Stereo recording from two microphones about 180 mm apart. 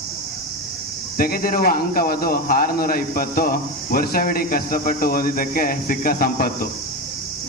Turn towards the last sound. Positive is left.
turn(degrees=55)  # may be behind; listen again after turning